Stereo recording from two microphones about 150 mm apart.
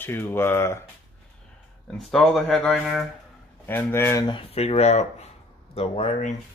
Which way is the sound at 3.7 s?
15° left (ahead or behind).